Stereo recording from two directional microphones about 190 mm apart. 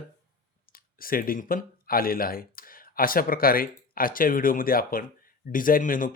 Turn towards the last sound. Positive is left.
turn(degrees=45)  # may be behind; listen again after turning